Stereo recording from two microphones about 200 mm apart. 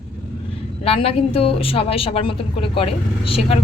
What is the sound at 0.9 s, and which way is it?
A woman's voice, 30° left (ahead or behind).